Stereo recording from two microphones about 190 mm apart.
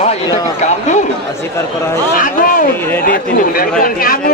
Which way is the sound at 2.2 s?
45° left (ahead or behind).